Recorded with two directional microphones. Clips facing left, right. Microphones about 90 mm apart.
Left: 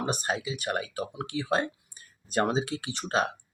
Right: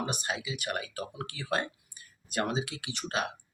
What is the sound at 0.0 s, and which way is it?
Speech, 35° left (ahead or behind).